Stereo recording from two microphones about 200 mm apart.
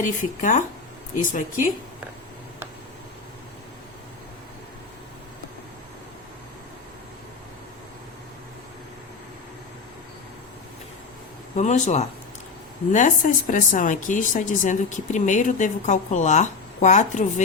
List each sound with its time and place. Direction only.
0.0 s speech: 40° left (ahead or behind)
11.5 s speech: 35° left (ahead or behind)